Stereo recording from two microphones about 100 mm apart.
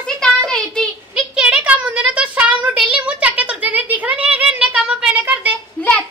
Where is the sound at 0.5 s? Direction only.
10° left (ahead or behind).